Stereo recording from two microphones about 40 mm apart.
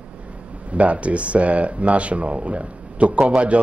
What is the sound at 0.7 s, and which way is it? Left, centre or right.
Speech, right.